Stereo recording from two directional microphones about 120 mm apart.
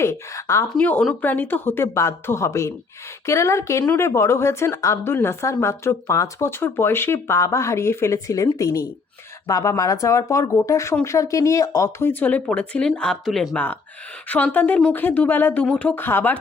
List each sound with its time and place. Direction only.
0.0 s speech: 25° left (ahead or behind)
0.8 s speech: 10° left (ahead or behind)